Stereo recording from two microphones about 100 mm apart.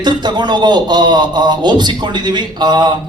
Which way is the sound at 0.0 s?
45° right (ahead or behind).